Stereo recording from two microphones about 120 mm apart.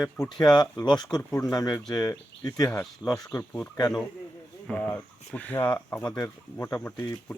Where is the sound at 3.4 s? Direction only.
15° left (ahead or behind).